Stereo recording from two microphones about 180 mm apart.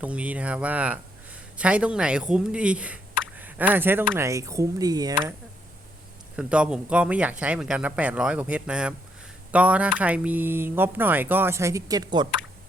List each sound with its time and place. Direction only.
0.0 s speech: 10° right (ahead or behind)
6.3 s speech: 5° right (ahead or behind); by 12.3 s 20° right (ahead or behind)